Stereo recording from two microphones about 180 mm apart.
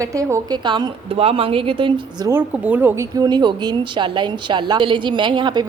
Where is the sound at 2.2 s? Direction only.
10° right (ahead or behind).